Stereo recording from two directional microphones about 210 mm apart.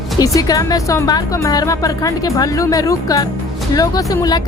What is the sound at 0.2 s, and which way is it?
A woman's voice, 15° left (ahead or behind).